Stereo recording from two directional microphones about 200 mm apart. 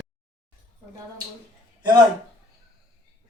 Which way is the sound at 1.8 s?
20° right (ahead or behind).